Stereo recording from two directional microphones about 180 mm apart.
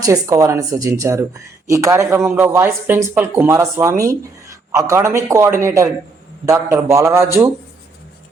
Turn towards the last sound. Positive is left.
turn(degrees=-15)  # may be behind; listen again after turning